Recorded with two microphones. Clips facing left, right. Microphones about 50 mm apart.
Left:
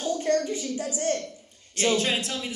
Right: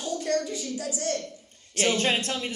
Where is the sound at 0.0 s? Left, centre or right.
Left.